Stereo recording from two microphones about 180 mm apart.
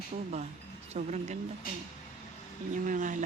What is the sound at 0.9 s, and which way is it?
Speech, 40° right (ahead or behind).